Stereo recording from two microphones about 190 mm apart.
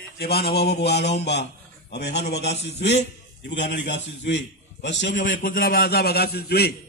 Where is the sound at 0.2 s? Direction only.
55° left (ahead or behind).